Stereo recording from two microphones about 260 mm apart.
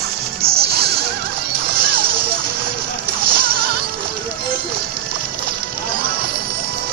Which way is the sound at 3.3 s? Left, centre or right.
Right.